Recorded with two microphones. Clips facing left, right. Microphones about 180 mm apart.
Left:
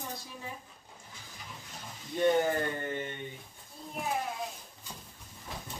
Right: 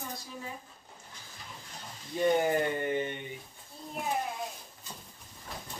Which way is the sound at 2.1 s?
10° right (ahead or behind).